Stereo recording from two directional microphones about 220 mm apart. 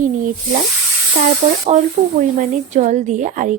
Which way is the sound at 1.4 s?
35° right (ahead or behind).